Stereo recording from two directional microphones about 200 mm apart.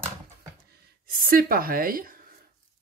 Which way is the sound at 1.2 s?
45° right (ahead or behind).